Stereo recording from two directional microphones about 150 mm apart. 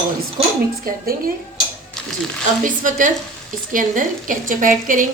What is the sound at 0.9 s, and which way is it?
Speech, 70° right (ahead or behind).